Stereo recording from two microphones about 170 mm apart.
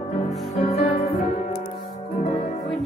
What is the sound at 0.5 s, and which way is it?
Music, 40° left (ahead or behind).